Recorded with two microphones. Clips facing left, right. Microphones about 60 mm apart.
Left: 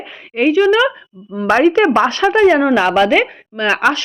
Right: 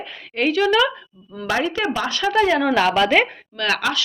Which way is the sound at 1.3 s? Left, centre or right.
Left.